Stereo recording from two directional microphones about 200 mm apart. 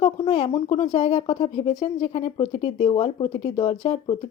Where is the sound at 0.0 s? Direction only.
30° left (ahead or behind).